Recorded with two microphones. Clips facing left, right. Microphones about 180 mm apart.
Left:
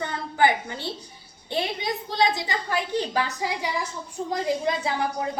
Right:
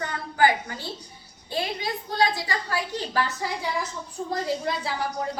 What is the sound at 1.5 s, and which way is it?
A woman's voice, 20° left (ahead or behind).